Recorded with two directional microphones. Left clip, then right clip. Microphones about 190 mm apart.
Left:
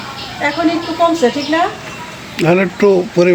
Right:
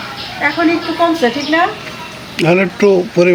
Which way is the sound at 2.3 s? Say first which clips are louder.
Right 1 dB; 5° right (ahead or behind).